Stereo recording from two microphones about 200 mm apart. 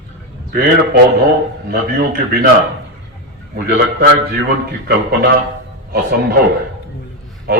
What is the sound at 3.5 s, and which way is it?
Speech, 60° right (ahead or behind).